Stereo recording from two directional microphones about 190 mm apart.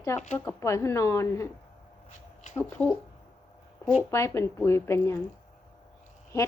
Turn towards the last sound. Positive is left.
turn(degrees=15)  # may be behind; listen again after turning